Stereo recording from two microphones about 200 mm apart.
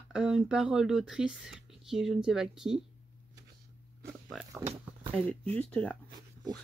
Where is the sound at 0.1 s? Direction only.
5° right (ahead or behind).